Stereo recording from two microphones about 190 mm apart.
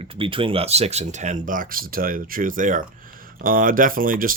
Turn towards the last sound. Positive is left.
turn(degrees=-45)  # may be behind; listen again after turning